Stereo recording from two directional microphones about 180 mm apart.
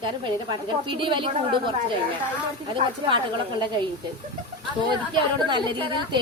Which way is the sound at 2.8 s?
30° right (ahead or behind).